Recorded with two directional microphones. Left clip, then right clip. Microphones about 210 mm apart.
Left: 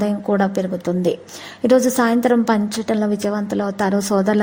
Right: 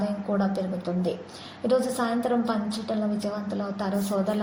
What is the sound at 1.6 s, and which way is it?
Speech, 45° left (ahead or behind).